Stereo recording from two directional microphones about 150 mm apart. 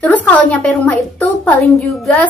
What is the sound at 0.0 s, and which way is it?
Speech, 10° left (ahead or behind).